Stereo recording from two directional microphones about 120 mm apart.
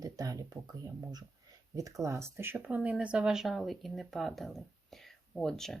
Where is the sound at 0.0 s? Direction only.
30° right (ahead or behind).